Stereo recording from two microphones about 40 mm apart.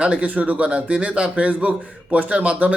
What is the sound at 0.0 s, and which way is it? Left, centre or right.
A man's voice, right.